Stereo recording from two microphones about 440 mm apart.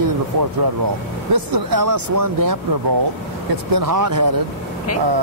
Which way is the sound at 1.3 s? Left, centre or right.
Right.